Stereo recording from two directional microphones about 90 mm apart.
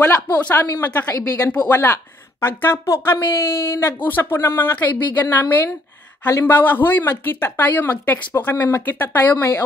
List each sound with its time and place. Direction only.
0.0 s speech: 20° left (ahead or behind)